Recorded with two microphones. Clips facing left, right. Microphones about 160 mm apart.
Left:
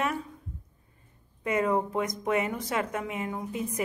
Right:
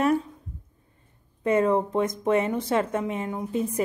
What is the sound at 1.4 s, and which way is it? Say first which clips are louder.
A woman's voice: right 5 dB; 30° right (ahead or behind).